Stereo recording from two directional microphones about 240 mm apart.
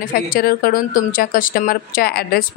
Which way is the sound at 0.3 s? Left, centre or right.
Left.